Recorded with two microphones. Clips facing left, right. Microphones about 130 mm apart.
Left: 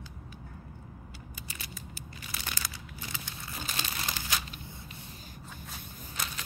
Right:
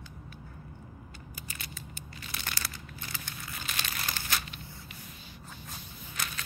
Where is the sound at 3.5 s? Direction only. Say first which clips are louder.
Left 2 dB; 30° left (ahead or behind).